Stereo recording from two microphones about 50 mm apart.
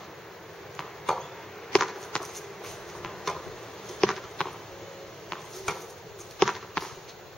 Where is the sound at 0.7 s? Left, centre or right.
Centre.